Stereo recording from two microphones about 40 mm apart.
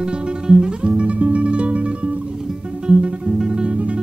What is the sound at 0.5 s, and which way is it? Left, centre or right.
Music, centre.